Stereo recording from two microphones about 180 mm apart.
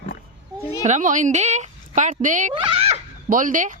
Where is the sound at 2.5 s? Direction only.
30° right (ahead or behind).